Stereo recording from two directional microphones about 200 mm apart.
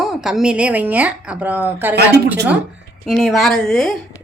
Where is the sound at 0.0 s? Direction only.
Centre (ahead or behind).